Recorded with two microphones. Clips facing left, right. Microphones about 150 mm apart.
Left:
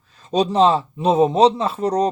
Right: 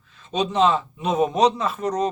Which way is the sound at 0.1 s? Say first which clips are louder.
Left 5 dB; 40° left (ahead or behind).